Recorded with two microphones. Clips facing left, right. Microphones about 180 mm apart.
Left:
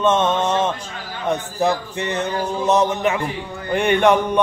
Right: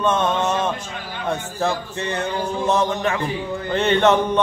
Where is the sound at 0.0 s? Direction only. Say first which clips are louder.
Left 2 dB; 20° left (ahead or behind).